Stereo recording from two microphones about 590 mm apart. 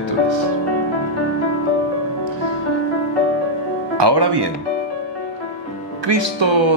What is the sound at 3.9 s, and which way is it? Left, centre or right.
Speech, right.